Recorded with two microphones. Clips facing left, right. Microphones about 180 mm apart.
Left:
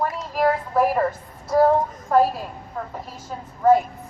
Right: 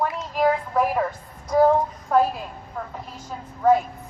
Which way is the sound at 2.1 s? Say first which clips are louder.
Left 2 dB; 5° left (ahead or behind).